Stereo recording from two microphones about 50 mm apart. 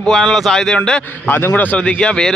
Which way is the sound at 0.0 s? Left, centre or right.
Centre.